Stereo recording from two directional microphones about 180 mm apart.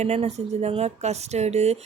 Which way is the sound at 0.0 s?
35° right (ahead or behind).